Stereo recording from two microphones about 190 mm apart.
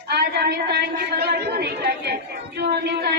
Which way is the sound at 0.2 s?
55° right (ahead or behind).